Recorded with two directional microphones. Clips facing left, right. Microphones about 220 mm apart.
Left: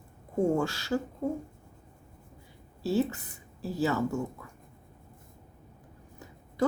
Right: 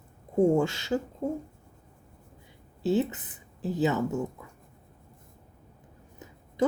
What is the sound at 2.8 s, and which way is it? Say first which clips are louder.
Speech: right 2 dB; 20° right (ahead or behind).